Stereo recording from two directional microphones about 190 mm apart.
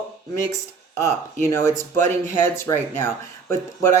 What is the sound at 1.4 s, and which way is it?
Speech, 15° left (ahead or behind).